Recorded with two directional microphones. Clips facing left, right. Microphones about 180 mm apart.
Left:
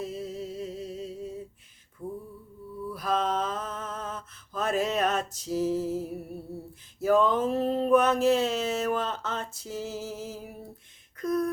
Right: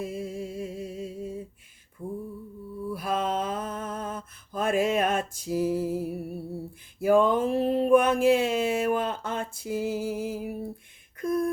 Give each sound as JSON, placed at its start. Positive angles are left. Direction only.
{"t": 0.0, "sound": "music", "side_deg": -10}
{"t": 2.0, "sound": "mantra", "side_deg": -50}
{"t": 2.9, "sound": "a sound", "side_deg": -10}